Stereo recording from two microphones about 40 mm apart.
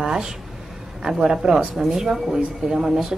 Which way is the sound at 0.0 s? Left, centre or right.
Centre.